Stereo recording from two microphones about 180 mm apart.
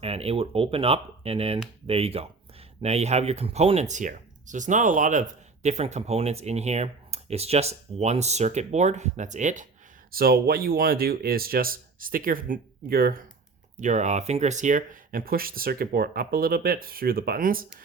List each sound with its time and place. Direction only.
0.0 s speech: 35° right (ahead or behind)
10.1 s speech: 55° right (ahead or behind)
13.7 s speech: 40° right (ahead or behind)